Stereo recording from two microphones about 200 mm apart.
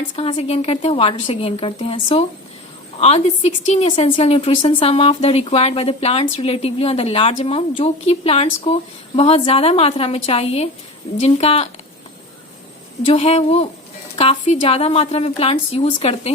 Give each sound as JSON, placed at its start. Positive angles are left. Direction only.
{"t": 0.2, "sound": "a woman's voice", "side_deg": 30}
{"t": 13.1, "sound": "a woman's voice", "side_deg": 30}